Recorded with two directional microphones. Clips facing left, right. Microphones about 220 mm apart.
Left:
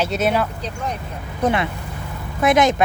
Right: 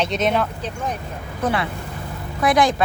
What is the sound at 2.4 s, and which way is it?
Speech, 25° left (ahead or behind).